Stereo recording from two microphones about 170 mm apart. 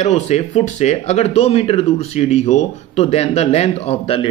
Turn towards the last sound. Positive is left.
turn(degrees=35)  # may be behind; listen again after turning